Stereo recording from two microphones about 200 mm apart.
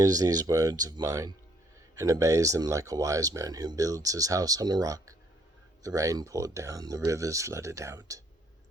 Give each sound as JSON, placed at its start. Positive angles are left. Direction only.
{"t": 0.0, "sound": "speech", "side_deg": -20}